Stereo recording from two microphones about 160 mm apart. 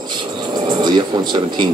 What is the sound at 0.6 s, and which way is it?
Speech, 25° right (ahead or behind).